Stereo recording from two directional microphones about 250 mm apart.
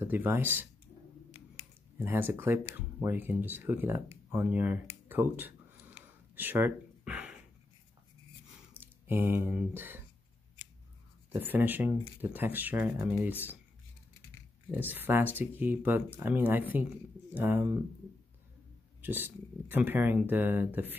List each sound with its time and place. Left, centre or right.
0.0 s speech: centre
1.3 s a sound: left
2.0 s speech: centre
5.9 s a sound: centre
8.7 s speech: centre
11.3 s speech: centre
14.7 s speech: centre
18.9 s speech: centre